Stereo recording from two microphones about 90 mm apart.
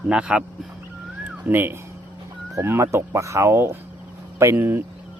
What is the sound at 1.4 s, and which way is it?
Speech, 25° right (ahead or behind).